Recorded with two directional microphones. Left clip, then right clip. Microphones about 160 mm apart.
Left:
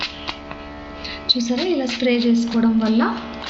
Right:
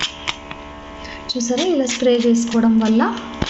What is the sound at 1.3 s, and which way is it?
A woman's voice, 45° right (ahead or behind).